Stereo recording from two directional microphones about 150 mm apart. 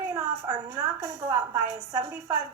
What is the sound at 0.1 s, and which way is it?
A woman's voice, 25° right (ahead or behind).